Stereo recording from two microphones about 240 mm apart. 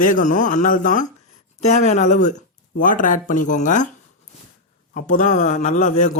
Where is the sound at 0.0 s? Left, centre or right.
Left.